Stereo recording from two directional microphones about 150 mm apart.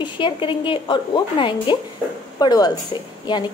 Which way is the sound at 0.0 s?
35° left (ahead or behind).